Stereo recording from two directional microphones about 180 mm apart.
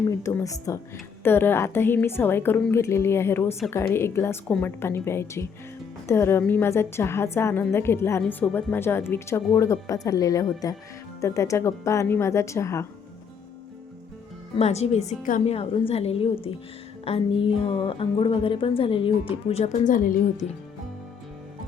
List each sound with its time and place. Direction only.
0.1 s speech: 15° left (ahead or behind)
14.5 s a woman's voice: 35° left (ahead or behind)
15.5 s a woman's voice: 30° left (ahead or behind); by 20.4 s 45° left (ahead or behind)